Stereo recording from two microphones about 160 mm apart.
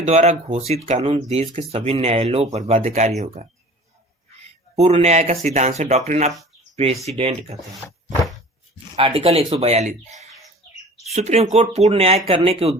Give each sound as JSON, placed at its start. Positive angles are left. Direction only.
{"t": 0.0, "sound": "speech", "side_deg": -40}
{"t": 3.4, "sound": "speech", "side_deg": -55}
{"t": 4.7, "sound": "speech", "side_deg": -40}
{"t": 9.0, "sound": "speech", "side_deg": -35}
{"t": 11.1, "sound": "speech", "side_deg": -45}